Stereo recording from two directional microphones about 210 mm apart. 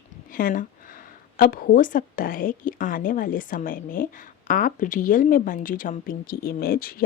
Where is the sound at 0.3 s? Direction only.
40° left (ahead or behind).